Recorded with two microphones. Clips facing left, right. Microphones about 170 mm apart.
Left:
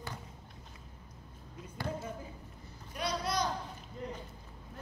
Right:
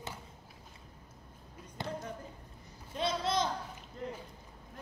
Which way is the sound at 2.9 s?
25° right (ahead or behind).